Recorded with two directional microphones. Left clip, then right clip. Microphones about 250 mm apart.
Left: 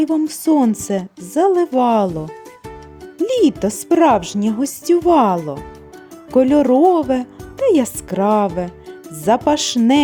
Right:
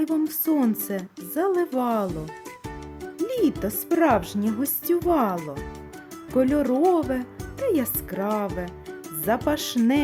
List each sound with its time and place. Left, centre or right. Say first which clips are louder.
0.0 s a woman's voice: left 7 dB; centre
3.2 s a woman's voice: left 9 dB; left